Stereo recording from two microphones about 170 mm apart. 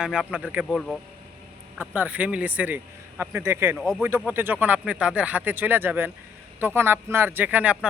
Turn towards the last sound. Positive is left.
turn(degrees=-5)  # may be behind; listen again after turning